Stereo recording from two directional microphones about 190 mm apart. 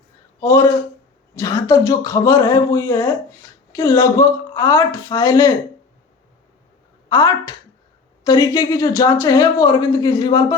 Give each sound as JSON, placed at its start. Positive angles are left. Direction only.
{"t": 0.3, "sound": "speech", "side_deg": 15}
{"t": 7.1, "sound": "speech", "side_deg": 20}